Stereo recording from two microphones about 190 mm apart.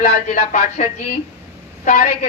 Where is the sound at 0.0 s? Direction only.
45° left (ahead or behind).